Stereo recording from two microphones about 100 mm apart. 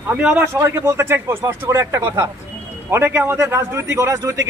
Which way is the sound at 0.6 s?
25° right (ahead or behind).